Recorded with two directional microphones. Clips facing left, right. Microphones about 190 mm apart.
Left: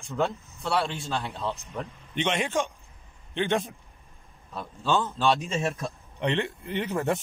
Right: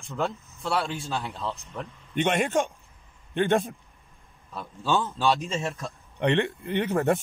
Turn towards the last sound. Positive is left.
turn(degrees=-60)  # may be behind; listen again after turning